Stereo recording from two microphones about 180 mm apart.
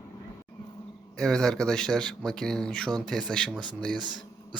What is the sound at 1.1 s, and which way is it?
Speech, 5° left (ahead or behind).